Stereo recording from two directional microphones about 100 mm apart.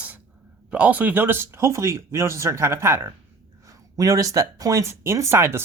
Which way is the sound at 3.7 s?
35° right (ahead or behind).